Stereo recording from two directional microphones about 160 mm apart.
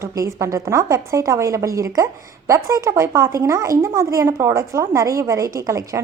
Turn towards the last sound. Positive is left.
turn(degrees=-20)  # may be behind; listen again after turning